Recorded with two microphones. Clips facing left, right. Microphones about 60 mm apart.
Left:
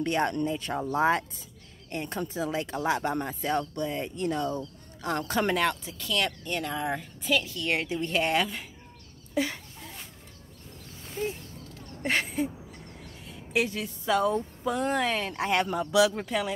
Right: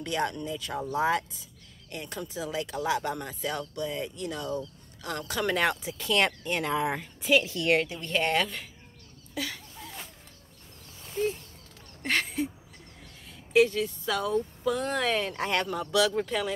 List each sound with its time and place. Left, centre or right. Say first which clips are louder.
0.0 s speech: left 4 dB; left
5.7 s a woman's voice: right 2 dB; centre
7.8 s speech: left 4 dB; left
8.1 s a woman's voice: even; centre
9.3 s a sound: left 6 dB; left
12.0 s a sound: left 1 dB; centre
13.5 s speech: right 6 dB; centre